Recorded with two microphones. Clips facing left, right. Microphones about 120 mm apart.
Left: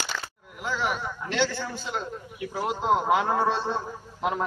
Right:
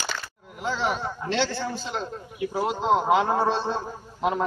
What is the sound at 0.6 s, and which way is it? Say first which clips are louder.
A man's voice: right 2 dB; 25° right (ahead or behind).